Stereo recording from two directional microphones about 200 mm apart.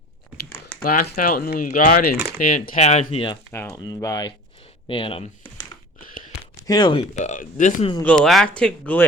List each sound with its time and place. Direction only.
0.6 s speech: 50° left (ahead or behind); by 3.3 s 30° left (ahead or behind)
3.5 s speech: 15° left (ahead or behind)
6.7 s speech: 20° left (ahead or behind)
7.2 s speech: 35° left (ahead or behind)
8.0 s speech: 5° left (ahead or behind)